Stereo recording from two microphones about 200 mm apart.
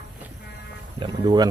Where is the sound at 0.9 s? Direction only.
20° right (ahead or behind).